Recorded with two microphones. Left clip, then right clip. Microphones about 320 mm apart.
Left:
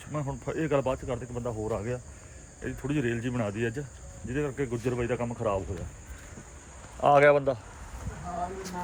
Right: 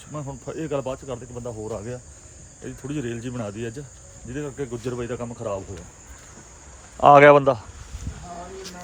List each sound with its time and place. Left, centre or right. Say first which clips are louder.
0.1 s cricket: even; centre
7.0 s speech: right 9 dB; right